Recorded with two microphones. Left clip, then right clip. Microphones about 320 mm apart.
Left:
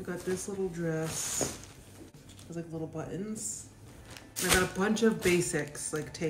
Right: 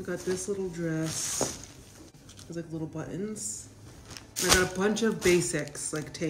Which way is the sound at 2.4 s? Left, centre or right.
Centre.